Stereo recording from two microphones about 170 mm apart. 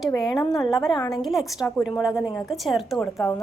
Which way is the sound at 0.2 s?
Centre (ahead or behind).